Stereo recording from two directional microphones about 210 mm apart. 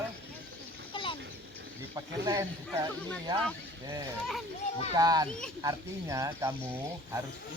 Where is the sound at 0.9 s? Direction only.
25° left (ahead or behind).